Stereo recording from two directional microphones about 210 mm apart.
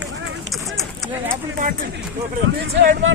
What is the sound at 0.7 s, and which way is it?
Clip-clop, centre (ahead or behind).